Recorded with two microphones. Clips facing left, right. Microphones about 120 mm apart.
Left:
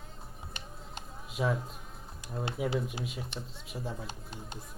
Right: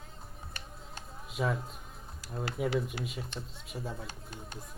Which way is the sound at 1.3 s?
Centre (ahead or behind).